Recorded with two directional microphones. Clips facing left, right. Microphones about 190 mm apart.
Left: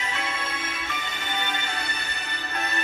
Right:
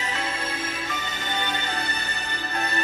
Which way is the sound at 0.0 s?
35° right (ahead or behind).